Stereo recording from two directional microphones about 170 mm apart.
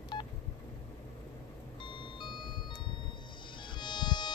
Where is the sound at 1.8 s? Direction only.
30° left (ahead or behind).